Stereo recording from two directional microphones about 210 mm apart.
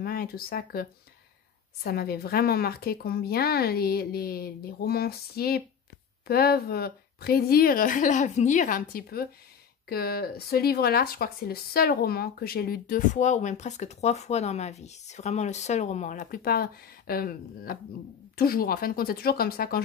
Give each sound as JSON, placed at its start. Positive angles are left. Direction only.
{"t": 0.0, "sound": "speech", "side_deg": 45}